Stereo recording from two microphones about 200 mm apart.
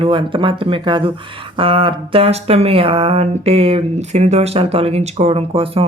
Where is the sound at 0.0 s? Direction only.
25° right (ahead or behind).